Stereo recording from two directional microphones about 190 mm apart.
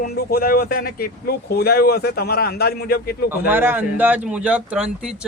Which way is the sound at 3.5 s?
10° right (ahead or behind).